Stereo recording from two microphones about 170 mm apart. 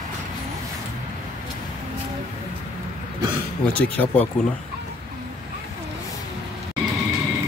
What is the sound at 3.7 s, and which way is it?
Speech, 10° left (ahead or behind).